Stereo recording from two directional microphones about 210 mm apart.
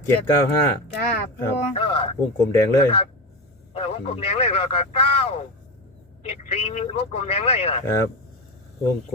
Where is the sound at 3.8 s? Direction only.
30° left (ahead or behind).